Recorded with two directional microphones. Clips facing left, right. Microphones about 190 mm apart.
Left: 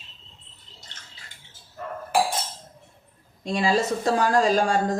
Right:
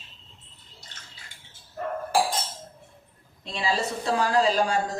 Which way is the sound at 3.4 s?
45° left (ahead or behind).